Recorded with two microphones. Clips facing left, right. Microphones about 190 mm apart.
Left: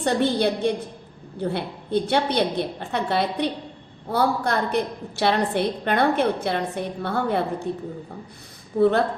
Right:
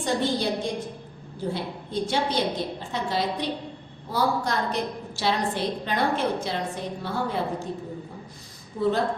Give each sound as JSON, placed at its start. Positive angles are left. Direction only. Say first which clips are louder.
{"t": 0.0, "sound": "a woman's voice", "louder": "left 4 dB", "side_deg": 65}
{"t": 8.7, "sound": "a woman's voice", "louder": "left 6 dB", "side_deg": 65}